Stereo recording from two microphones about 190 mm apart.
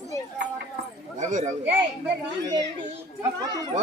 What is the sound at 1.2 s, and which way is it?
Speech, 40° right (ahead or behind).